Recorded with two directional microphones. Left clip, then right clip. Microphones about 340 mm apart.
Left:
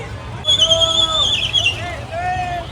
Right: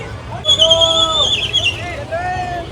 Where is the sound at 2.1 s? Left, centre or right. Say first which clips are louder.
Right 1 dB; left.